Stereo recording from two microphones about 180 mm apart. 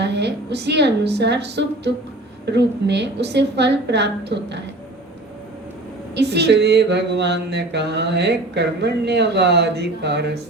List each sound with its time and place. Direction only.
0.0 s mantra: 70° right (ahead or behind)
6.1 s mantra: 70° right (ahead or behind)